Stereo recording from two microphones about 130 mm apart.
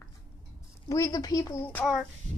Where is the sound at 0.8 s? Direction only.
25° left (ahead or behind).